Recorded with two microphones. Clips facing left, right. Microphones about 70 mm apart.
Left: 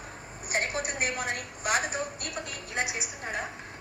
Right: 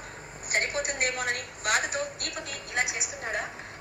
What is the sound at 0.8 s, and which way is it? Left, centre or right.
Speech, right.